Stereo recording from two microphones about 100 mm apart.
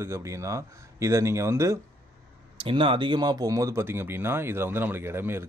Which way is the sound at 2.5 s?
60° right (ahead or behind).